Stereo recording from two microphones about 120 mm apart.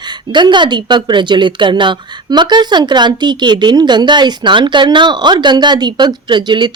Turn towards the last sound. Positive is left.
turn(degrees=-40)  # may be behind; listen again after turning